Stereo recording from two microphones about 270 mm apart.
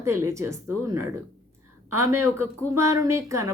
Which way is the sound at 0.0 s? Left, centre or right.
Centre.